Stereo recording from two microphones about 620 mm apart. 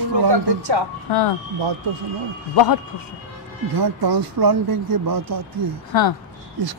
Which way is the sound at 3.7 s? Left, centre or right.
Right.